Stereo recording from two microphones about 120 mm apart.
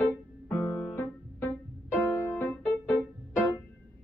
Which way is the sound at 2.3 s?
15° left (ahead or behind).